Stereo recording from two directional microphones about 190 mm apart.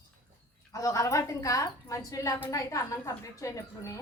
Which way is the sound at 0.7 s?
15° left (ahead or behind).